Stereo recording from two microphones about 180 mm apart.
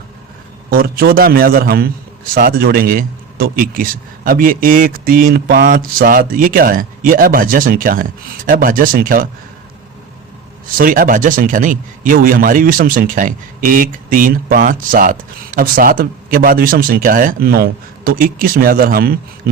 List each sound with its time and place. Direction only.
0.7 s a man's voice: 60° right (ahead or behind)
10.8 s a man's voice: 50° right (ahead or behind)